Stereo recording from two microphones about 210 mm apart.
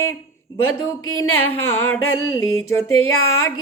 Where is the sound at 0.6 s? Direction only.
80° left.